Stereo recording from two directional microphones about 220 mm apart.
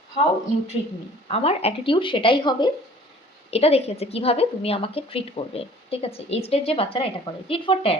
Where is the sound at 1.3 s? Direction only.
25° left (ahead or behind).